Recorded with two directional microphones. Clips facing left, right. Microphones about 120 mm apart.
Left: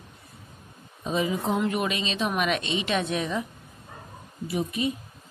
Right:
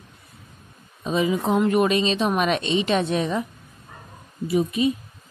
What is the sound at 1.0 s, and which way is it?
Speech, 90° right.